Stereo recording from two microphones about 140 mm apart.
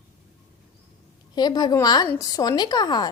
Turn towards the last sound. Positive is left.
turn(degrees=30)  # may be behind; listen again after turning